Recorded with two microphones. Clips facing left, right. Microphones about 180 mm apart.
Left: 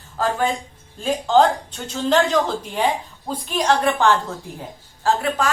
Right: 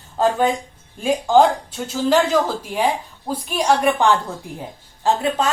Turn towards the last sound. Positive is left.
turn(degrees=-25)  # may be behind; listen again after turning